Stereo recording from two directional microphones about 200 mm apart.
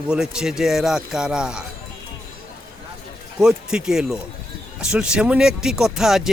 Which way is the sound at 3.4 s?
5° right (ahead or behind).